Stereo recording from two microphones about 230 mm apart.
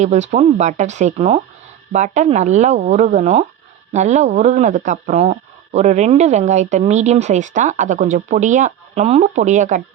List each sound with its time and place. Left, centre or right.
0.0 s speech: right